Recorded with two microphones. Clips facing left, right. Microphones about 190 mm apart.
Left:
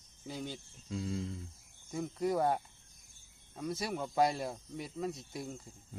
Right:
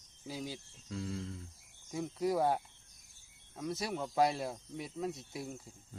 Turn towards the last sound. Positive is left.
turn(degrees=0)  # may be behind; listen again after turning